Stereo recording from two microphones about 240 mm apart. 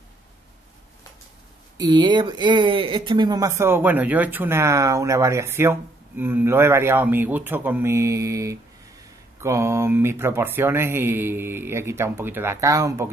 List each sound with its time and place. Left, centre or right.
1.8 s speech: centre